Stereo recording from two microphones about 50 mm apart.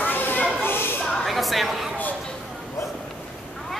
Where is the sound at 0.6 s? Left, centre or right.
Left.